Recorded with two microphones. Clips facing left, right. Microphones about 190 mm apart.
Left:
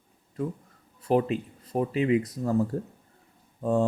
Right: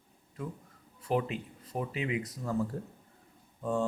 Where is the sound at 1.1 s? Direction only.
40° left (ahead or behind).